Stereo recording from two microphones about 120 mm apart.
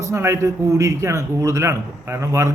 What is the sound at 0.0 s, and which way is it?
A man's voice, 25° right (ahead or behind).